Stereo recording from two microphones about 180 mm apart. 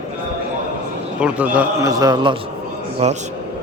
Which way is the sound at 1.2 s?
5° right (ahead or behind).